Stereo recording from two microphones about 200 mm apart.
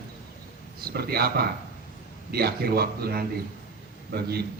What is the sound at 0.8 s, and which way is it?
A man's voice, 50° right (ahead or behind).